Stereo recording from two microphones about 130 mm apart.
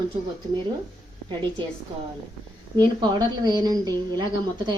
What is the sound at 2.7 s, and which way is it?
A woman's voice, 35° right (ahead or behind).